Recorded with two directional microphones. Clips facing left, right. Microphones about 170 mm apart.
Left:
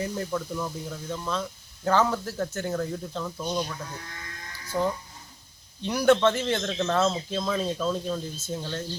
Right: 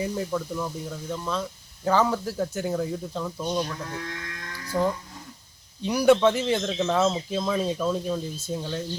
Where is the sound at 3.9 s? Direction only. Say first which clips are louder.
Right 6 dB; 90° right.